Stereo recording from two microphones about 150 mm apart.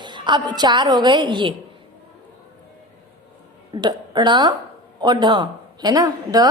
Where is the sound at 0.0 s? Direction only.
30° right (ahead or behind).